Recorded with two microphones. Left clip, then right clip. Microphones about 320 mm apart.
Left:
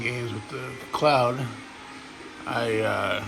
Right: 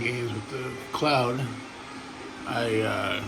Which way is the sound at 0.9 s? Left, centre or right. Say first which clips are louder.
Left 4 dB; centre.